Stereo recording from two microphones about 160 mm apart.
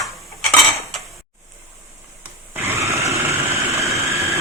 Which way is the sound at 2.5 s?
15° right (ahead or behind).